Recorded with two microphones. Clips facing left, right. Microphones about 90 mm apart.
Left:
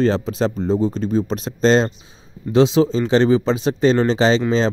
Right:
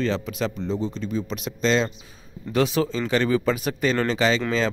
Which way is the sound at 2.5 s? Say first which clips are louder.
Left 7 dB; 25° left (ahead or behind).